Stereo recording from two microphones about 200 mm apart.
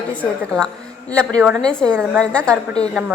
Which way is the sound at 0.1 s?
5° left (ahead or behind).